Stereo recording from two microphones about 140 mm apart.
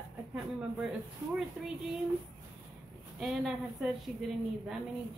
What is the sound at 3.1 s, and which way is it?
A woman's voice, 5° right (ahead or behind).